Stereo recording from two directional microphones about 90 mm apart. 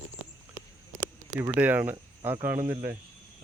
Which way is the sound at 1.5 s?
20° right (ahead or behind).